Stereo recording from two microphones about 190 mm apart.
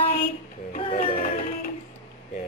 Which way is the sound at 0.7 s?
40° left (ahead or behind).